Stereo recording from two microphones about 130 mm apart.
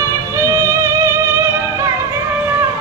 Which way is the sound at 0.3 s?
20° right (ahead or behind).